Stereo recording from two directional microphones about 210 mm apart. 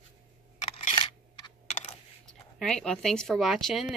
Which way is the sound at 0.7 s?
20° left (ahead or behind).